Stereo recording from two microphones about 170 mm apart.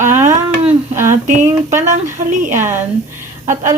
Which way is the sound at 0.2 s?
45° right (ahead or behind).